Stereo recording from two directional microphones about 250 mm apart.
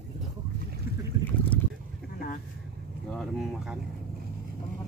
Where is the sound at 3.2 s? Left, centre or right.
Centre.